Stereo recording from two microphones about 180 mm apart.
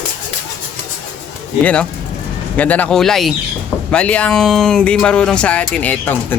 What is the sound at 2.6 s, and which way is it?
Speech, 10° left (ahead or behind).